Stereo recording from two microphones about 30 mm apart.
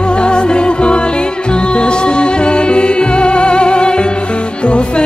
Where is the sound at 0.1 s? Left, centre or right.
Left.